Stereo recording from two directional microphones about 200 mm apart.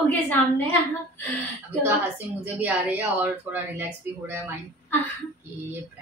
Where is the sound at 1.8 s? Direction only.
10° right (ahead or behind).